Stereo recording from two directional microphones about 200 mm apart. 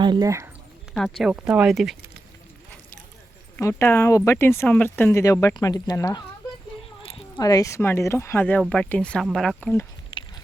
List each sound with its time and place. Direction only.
0.0 s speech: 20° right (ahead or behind)
1.2 s speech: 5° right (ahead or behind)
3.6 s speech: 15° left (ahead or behind)